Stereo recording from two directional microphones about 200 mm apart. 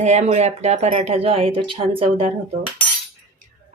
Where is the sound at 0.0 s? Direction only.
35° right (ahead or behind).